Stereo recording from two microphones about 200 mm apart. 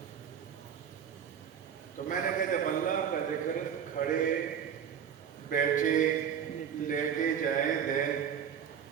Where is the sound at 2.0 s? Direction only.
40° left (ahead or behind).